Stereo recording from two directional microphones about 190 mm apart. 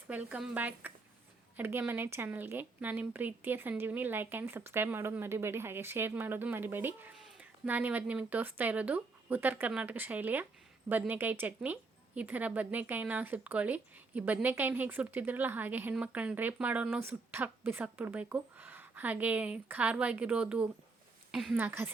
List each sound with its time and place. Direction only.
0.1 s a woman's voice: 5° right (ahead or behind)